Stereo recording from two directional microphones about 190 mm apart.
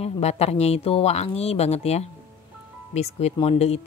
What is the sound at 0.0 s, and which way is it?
A woman's voice, 35° left (ahead or behind).